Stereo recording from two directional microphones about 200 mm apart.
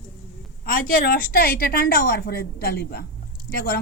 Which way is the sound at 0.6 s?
45° left (ahead or behind).